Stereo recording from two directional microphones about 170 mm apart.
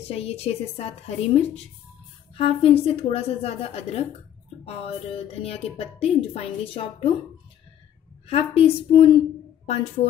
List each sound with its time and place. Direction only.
0.1 s speech: 35° left (ahead or behind)
8.3 s speech: 35° left (ahead or behind)